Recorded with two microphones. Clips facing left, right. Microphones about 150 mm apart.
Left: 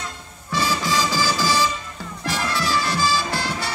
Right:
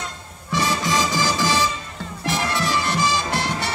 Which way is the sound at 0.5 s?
20° right (ahead or behind).